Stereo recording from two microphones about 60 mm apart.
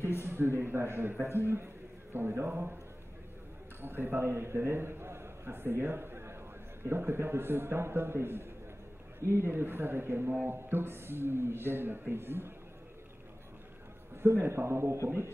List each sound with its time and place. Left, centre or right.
0.2 s a man's voice: right
3.8 s a man's voice: right
14.1 s a man's voice: right